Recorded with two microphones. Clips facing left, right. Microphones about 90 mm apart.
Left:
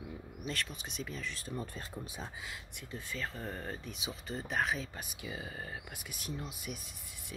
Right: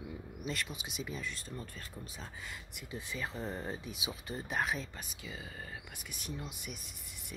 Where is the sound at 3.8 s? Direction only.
5° right (ahead or behind).